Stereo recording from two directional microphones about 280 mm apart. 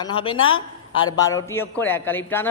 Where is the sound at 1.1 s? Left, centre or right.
Centre.